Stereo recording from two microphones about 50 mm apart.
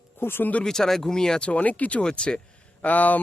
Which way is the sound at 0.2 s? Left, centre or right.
Left.